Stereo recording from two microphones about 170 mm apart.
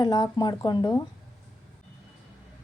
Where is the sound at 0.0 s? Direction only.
25° left (ahead or behind).